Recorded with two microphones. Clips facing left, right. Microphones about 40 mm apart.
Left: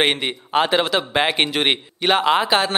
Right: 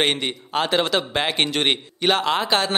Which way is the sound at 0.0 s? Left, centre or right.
Centre.